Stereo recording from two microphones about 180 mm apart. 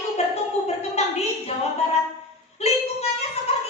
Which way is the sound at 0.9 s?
35° left (ahead or behind).